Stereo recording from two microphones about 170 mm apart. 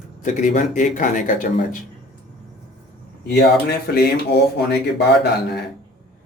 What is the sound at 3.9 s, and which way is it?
Speech, 70° left (ahead or behind).